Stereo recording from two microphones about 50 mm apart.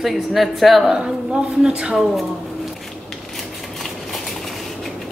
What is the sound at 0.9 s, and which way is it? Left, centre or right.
A woman's voice, centre.